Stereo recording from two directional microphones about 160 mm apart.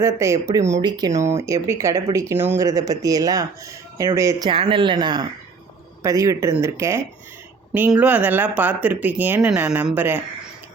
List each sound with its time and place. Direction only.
0.0 s speech: 20° right (ahead or behind)
4.4 s speech: 35° right (ahead or behind); by 10.2 s 10° right (ahead or behind)